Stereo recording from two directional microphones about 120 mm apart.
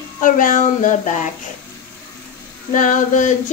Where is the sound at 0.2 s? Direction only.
90° left.